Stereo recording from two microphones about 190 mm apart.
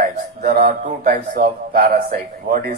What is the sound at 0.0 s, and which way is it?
A man's voice, 50° right (ahead or behind).